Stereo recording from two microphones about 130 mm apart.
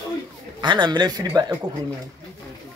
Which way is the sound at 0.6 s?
35° right (ahead or behind).